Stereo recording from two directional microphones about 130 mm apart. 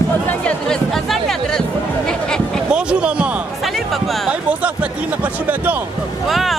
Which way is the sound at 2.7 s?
10° right (ahead or behind).